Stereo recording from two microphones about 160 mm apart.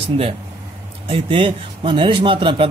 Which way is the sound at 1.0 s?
35° right (ahead or behind).